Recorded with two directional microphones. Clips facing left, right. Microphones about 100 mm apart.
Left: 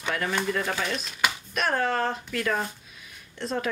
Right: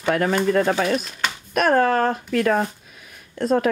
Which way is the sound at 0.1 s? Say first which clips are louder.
Right 9 dB; 50° right (ahead or behind).